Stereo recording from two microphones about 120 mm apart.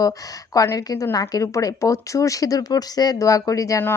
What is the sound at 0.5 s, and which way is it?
Speech, 30° left (ahead or behind).